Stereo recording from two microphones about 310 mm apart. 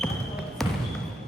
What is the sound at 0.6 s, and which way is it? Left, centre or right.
Basketball bounce, centre.